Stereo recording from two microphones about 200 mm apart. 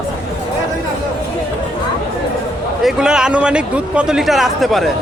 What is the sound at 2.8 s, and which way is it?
A man's voice, 5° right (ahead or behind).